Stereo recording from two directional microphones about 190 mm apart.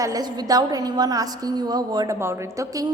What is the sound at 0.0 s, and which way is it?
A woman's voice, 20° right (ahead or behind).